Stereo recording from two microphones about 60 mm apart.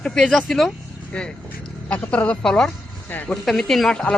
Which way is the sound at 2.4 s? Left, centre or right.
Centre.